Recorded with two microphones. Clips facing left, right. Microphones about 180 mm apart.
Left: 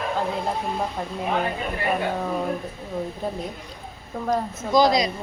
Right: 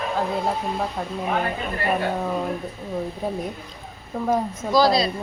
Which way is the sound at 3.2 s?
10° right (ahead or behind).